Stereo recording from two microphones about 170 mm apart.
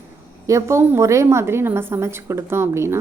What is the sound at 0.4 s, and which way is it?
A woman's voice, 15° right (ahead or behind).